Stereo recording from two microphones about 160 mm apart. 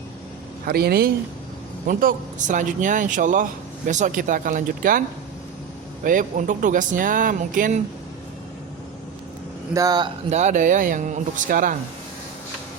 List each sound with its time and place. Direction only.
0.6 s speech: 75° right (ahead or behind)
1.9 s speech: 60° right (ahead or behind)
6.1 s speech: 55° right (ahead or behind)
9.7 s speech: 25° right (ahead or behind)
10.2 s speech: 45° right (ahead or behind)